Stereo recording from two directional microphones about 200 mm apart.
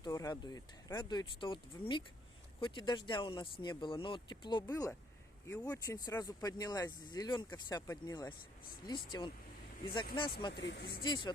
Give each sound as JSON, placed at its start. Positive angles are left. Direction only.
{"t": 0.0, "sound": "speech", "side_deg": 15}
{"t": 4.7, "sound": "speech", "side_deg": 10}
{"t": 10.5, "sound": "speech", "side_deg": 60}
{"t": 11.0, "sound": "speech", "side_deg": 20}